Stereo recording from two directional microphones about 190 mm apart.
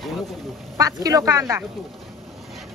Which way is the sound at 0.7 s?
20° right (ahead or behind).